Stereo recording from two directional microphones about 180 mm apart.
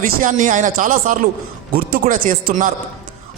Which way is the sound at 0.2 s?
45° right (ahead or behind).